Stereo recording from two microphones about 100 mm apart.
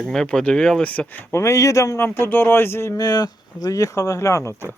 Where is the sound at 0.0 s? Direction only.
5° left (ahead or behind); by 2.0 s 35° left (ahead or behind).